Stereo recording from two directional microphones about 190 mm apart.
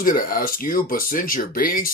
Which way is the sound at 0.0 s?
50° left (ahead or behind).